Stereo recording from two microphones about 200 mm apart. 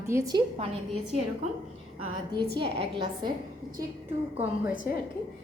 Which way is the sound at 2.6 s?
25° right (ahead or behind).